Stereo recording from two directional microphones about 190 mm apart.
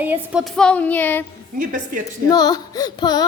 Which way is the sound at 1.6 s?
45° right (ahead or behind).